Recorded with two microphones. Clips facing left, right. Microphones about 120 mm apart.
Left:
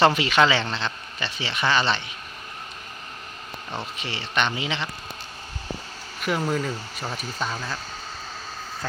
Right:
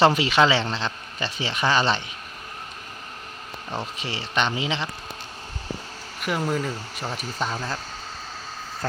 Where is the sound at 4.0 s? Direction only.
35° right (ahead or behind).